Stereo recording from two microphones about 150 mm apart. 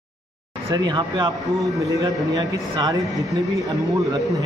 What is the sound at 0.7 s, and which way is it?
Speech, 30° right (ahead or behind).